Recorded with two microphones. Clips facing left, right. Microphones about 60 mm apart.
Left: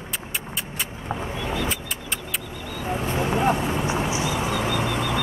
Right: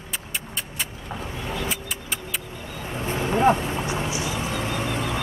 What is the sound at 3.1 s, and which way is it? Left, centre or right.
Vehicle, centre.